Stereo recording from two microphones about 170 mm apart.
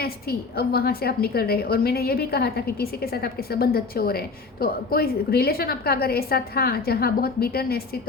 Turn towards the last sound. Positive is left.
turn(degrees=65)  # may be behind; listen again after turning